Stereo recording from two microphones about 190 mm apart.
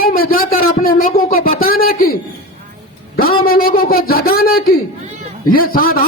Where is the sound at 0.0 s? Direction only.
50° left (ahead or behind).